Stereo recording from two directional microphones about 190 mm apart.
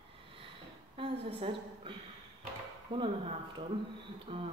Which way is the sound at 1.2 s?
30° right (ahead or behind).